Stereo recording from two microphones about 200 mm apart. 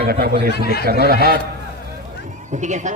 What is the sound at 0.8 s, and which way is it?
Speech, 50° right (ahead or behind).